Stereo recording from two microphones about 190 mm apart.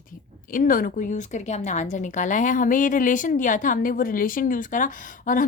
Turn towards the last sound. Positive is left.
turn(degrees=45)  # may be behind; listen again after turning